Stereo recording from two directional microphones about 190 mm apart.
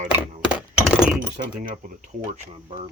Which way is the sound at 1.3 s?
40° right (ahead or behind).